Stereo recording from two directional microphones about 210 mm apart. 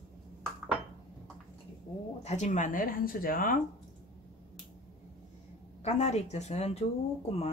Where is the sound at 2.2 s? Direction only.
35° left (ahead or behind).